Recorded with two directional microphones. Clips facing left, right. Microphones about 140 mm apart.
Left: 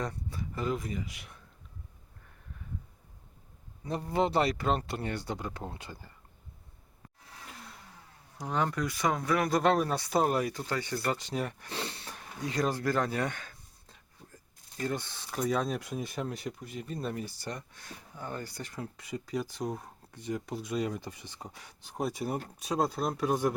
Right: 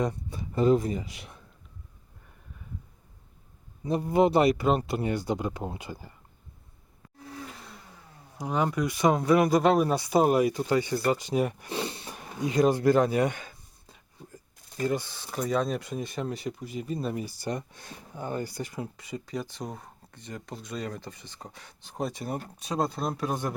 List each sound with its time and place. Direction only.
0.0 s speech: 20° right (ahead or behind)
3.8 s speech: 15° right (ahead or behind)
8.4 s speech: 10° right (ahead or behind)
9.5 s speech: 5° right (ahead or behind)